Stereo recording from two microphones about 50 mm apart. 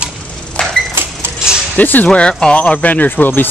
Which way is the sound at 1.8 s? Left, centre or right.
Left.